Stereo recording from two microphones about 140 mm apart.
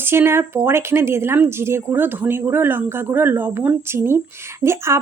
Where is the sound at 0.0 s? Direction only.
15° right (ahead or behind).